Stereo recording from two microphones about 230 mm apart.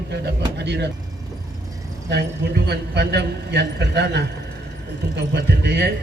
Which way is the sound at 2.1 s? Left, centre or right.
Right.